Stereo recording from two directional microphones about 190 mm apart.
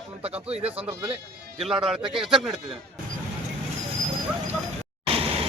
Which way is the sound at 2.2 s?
Centre (ahead or behind).